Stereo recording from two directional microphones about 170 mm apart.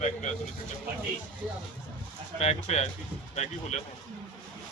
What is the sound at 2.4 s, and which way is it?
Speech, 40° left (ahead or behind).